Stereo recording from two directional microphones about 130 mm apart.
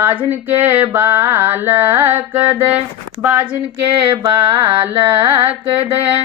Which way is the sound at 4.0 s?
40° right (ahead or behind).